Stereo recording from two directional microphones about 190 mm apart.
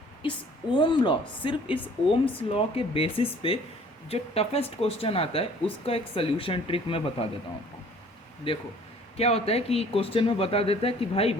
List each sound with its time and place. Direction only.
0.2 s speech: 25° left (ahead or behind)
8.5 s speech: 30° left (ahead or behind)